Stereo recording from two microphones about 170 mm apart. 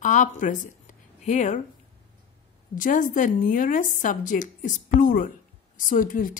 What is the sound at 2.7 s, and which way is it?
Speech, 50° left (ahead or behind).